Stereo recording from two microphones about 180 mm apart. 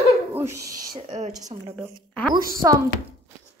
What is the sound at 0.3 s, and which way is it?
Owl, 15° right (ahead or behind).